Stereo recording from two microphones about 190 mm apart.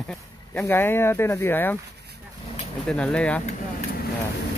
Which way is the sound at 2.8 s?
5° left (ahead or behind).